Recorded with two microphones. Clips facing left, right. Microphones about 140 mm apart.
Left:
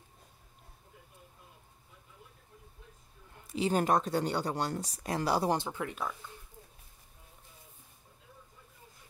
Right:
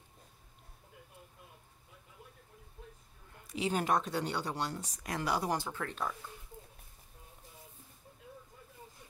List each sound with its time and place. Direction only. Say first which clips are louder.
3.5 s speech: left 4 dB; 35° left (ahead or behind)
5.7 s speech: left 3 dB; 15° left (ahead or behind)